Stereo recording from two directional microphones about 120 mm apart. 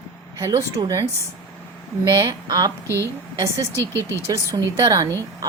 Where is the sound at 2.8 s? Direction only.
25° left (ahead or behind).